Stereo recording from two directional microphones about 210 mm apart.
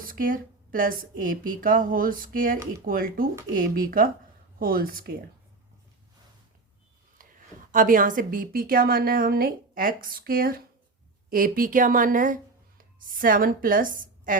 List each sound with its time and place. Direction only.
0.0 s a woman's voice: 40° right (ahead or behind)
7.7 s a woman's voice: 40° right (ahead or behind)